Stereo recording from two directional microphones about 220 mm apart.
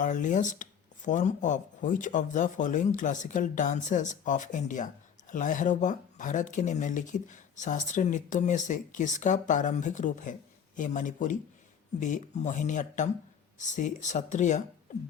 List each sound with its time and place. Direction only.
0.0 s speech: 35° left (ahead or behind)